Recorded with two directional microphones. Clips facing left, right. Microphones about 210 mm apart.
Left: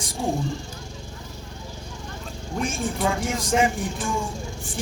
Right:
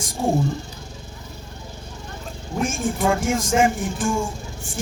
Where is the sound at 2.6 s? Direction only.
45° right (ahead or behind).